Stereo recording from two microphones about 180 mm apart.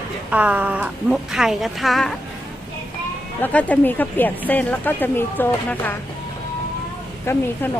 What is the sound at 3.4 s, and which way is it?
A woman's voice, 10° left (ahead or behind).